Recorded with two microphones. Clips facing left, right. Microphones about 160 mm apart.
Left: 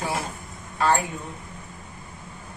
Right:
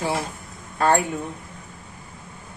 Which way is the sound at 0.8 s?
55° right (ahead or behind).